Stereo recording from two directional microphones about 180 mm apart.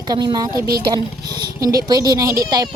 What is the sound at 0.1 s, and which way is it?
Speech, 20° right (ahead or behind).